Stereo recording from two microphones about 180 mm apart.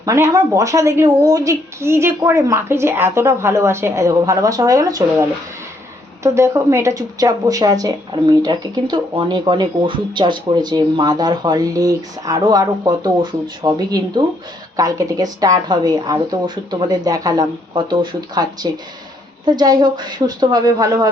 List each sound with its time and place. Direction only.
0.0 s a woman's voice: 20° right (ahead or behind)
6.2 s speech: 15° right (ahead or behind)